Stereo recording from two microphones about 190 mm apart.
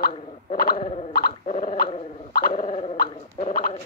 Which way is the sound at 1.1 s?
50° left (ahead or behind).